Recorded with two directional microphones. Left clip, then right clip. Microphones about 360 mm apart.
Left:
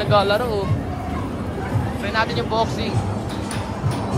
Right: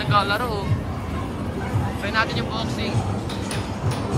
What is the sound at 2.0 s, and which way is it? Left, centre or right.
Speech, centre.